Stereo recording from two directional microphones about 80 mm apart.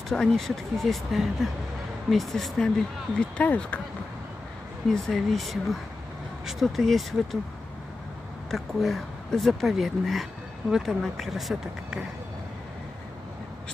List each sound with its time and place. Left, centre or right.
0.1 s speech: centre
3.2 s speech: centre
4.8 s speech: centre
8.5 s speech: centre